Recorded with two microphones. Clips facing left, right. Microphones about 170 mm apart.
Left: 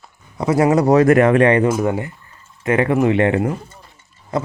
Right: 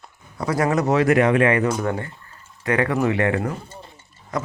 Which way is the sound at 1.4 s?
30° left (ahead or behind).